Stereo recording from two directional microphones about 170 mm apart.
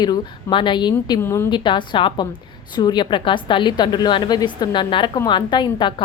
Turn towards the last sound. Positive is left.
turn(degrees=25)  # may be behind; listen again after turning